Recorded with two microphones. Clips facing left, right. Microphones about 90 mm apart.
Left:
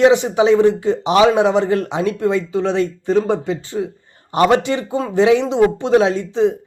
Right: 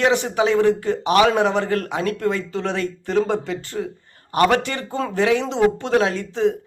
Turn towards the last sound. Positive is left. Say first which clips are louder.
# left 4 dB
turn(degrees=20)  # may be behind; listen again after turning